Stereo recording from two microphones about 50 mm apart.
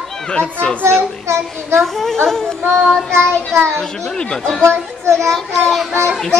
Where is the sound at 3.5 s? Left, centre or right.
Right.